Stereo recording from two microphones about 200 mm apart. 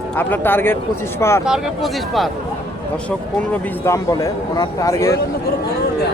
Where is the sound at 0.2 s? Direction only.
10° left (ahead or behind).